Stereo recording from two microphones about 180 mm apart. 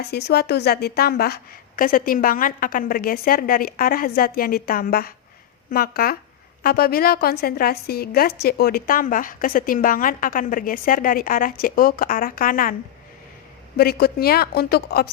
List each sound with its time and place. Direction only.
0.0 s a woman's voice: 65° left (ahead or behind)
13.7 s a woman's voice: 60° left (ahead or behind)